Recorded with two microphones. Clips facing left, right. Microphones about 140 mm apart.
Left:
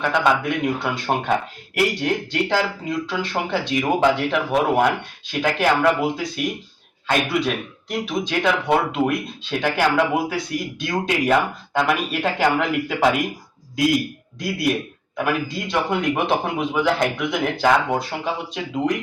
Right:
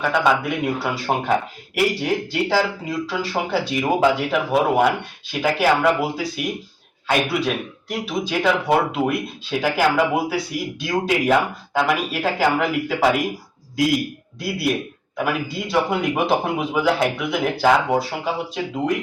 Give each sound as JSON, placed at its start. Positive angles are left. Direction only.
{"t": 0.0, "sound": "speech", "side_deg": -5}
{"t": 14.3, "sound": "speech", "side_deg": -5}